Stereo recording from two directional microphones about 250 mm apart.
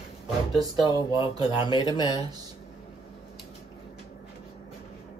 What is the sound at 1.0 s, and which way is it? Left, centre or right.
Speech, centre.